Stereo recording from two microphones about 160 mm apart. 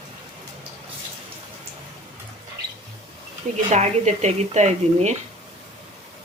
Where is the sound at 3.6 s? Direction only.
45° right (ahead or behind).